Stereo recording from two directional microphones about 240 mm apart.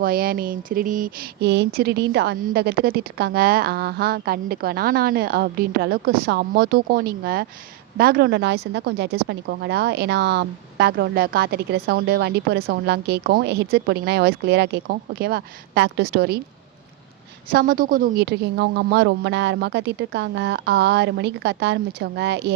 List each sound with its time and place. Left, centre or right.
0.0 s a woman's voice: right
17.5 s a woman's voice: right